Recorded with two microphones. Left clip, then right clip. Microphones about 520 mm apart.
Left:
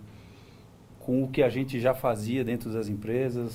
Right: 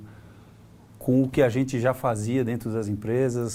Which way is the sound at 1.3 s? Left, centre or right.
Right.